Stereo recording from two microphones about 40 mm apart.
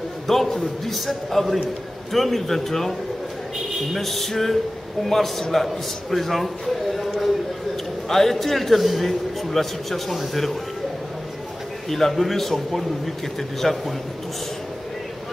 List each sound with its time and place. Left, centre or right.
0.3 s a man's voice: centre
11.9 s a man's voice: centre